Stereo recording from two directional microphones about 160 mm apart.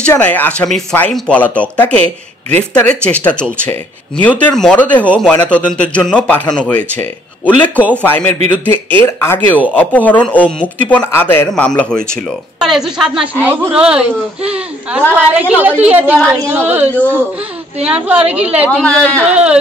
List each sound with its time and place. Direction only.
0.0 s a woman's voice: 10° left (ahead or behind); by 16.2 s 10° right (ahead or behind)
17.7 s a woman's voice: 5° right (ahead or behind)
18.2 s a woman's voice: 40° right (ahead or behind)
18.7 s speech: 10° left (ahead or behind)
19.3 s a woman's voice: 5° right (ahead or behind)